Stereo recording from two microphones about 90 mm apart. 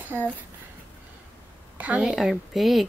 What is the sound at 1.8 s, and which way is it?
Speech, 15° right (ahead or behind).